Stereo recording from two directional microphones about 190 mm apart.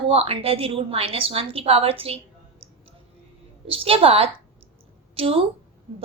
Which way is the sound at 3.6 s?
30° right (ahead or behind).